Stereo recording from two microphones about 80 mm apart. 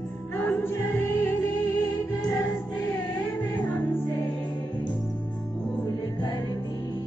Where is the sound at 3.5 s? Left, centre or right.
Left.